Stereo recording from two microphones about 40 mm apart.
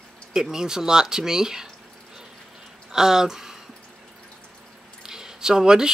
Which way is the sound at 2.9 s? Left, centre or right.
Centre.